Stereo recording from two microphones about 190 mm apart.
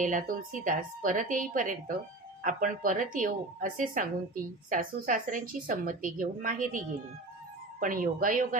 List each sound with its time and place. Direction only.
0.0 s a woman's voice: 45° right (ahead or behind)
7.8 s a woman's voice: 45° right (ahead or behind)